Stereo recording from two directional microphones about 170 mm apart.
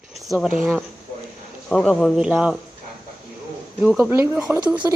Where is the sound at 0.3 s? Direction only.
5° right (ahead or behind).